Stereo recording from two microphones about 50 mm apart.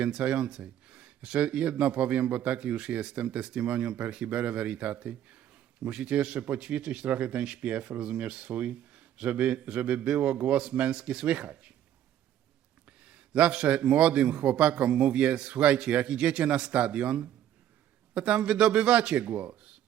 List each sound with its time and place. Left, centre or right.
0.0 s a man's voice: right
13.1 s a man's voice: right